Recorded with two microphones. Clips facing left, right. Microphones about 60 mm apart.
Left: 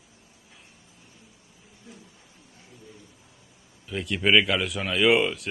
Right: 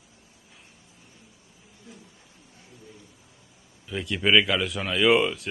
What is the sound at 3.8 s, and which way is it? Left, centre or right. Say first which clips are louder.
Speech: even; centre.